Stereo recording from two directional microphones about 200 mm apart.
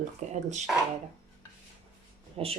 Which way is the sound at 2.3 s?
30° right (ahead or behind).